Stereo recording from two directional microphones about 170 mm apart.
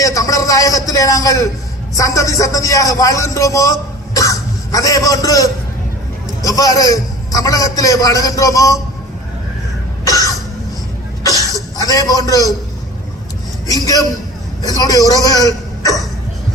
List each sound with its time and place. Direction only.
0.0 s a man's voice: 20° left (ahead or behind)
10.0 s cough: 20° left (ahead or behind)
11.2 s a sound: 20° left (ahead or behind)
13.7 s a man's voice: 20° left (ahead or behind)